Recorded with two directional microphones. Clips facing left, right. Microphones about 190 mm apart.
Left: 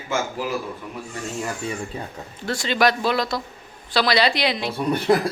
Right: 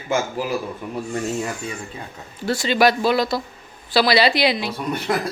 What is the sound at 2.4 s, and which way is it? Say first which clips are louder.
Speech: right 3 dB; 5° right (ahead or behind).